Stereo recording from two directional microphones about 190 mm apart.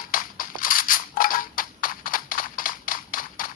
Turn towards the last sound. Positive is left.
turn(degrees=45)  # may be behind; listen again after turning